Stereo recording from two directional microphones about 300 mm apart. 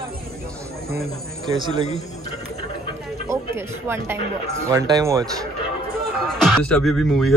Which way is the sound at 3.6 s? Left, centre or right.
Centre.